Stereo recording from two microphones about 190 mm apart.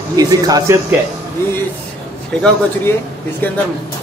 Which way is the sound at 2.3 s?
5° left (ahead or behind).